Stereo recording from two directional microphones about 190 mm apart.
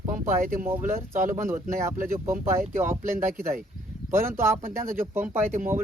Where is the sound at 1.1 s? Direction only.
45° right (ahead or behind).